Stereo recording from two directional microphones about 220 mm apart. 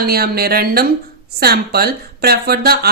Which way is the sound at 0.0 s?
45° right (ahead or behind).